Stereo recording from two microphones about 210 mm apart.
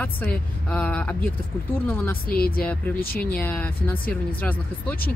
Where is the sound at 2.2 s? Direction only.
45° left (ahead or behind).